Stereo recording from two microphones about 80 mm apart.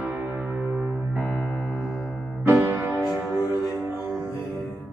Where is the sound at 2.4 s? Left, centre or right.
Right.